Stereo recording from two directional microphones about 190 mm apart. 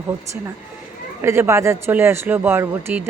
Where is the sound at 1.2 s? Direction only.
15° right (ahead or behind).